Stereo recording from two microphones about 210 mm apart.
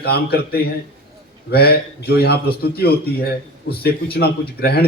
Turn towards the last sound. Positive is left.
turn(degrees=50)  # may be behind; listen again after turning